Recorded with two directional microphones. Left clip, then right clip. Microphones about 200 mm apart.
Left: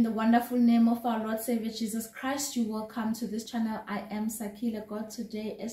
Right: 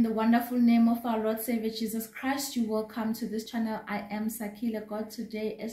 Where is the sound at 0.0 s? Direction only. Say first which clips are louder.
Even; 10° right (ahead or behind).